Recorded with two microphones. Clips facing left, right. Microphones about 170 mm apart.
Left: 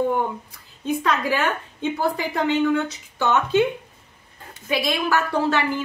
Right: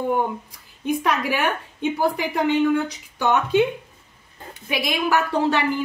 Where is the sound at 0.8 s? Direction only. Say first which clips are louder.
Even; 15° right (ahead or behind).